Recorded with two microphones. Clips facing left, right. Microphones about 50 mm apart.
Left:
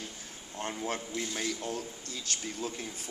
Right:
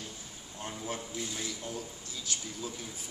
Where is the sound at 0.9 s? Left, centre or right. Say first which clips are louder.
Left 3 dB; left.